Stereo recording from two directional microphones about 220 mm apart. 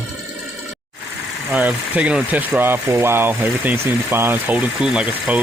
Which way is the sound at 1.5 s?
5° right (ahead or behind).